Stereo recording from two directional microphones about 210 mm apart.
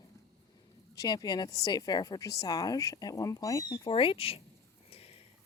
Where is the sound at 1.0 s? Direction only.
20° left (ahead or behind).